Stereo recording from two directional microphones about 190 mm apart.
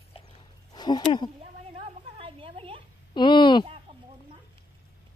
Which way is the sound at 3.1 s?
25° left (ahead or behind).